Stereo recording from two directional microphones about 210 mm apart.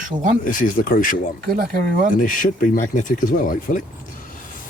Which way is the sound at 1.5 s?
45° right (ahead or behind).